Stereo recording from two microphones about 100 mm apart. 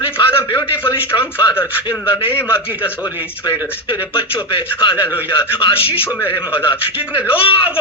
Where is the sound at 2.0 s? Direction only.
65° left (ahead or behind).